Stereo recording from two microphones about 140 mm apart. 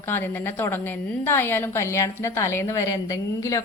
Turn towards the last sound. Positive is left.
turn(degrees=25)  # may be behind; listen again after turning